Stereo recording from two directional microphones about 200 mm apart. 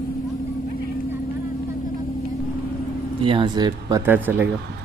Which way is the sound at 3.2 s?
25° right (ahead or behind).